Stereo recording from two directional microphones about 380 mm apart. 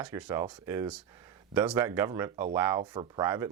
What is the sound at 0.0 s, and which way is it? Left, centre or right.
Speech, centre.